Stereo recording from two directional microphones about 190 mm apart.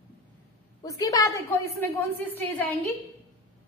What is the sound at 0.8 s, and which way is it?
A woman's voice, 20° left (ahead or behind).